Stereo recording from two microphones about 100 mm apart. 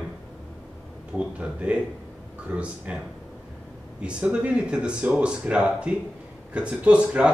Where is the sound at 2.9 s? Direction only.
10° right (ahead or behind).